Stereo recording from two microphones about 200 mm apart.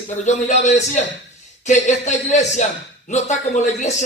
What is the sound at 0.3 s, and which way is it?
A man's voice, 35° left (ahead or behind).